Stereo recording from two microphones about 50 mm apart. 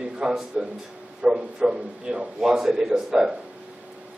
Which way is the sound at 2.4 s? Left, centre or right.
Centre.